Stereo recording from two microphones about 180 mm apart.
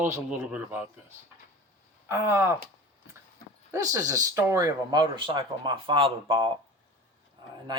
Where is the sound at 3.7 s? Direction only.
20° right (ahead or behind).